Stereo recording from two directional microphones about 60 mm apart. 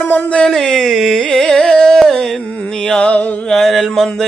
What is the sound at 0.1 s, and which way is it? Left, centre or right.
Speech, left.